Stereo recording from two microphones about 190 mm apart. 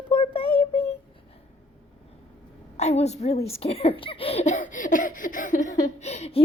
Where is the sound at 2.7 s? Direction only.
35° left (ahead or behind).